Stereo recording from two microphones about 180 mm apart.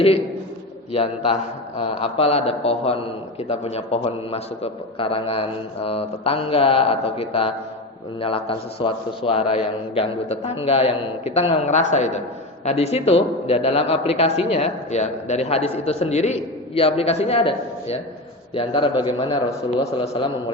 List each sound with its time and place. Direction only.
0.9 s a man's voice: 35° left (ahead or behind)